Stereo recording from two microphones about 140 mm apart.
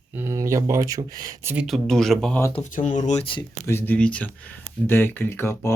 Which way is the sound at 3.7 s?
15° left (ahead or behind).